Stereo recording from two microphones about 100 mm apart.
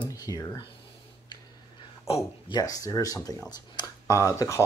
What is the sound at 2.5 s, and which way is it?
Speech, 35° left (ahead or behind).